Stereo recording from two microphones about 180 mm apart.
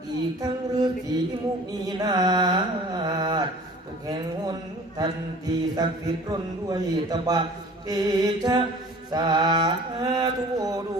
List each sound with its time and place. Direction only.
0.4 s a man's voice: 20° right (ahead or behind)